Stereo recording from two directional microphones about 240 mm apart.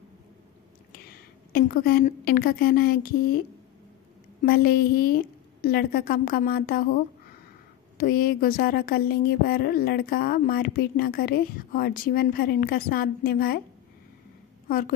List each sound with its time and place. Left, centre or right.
1.5 s speech: left
4.4 s speech: left
8.0 s speech: left
14.7 s speech: left